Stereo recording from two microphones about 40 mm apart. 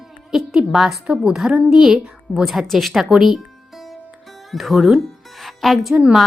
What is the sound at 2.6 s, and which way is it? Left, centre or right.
Music, centre.